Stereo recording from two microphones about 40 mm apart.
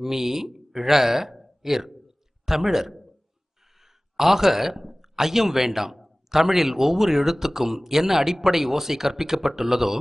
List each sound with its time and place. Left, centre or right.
0.0 s speech: centre
4.2 s speech: centre